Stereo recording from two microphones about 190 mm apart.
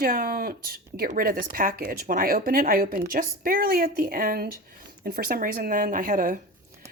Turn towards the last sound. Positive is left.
turn(degrees=-45)  # may be behind; listen again after turning